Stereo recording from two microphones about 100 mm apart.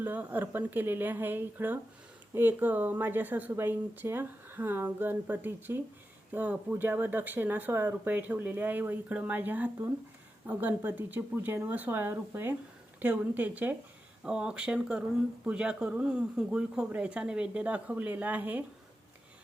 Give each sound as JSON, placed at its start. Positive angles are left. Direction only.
{"t": 0.0, "sound": "speech", "side_deg": -15}